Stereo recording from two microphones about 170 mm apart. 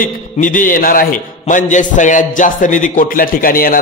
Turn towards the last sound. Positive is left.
turn(degrees=55)  # may be behind; listen again after turning